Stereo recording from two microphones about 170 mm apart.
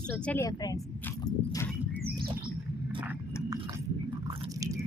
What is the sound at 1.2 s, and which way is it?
Horse, 20° left (ahead or behind).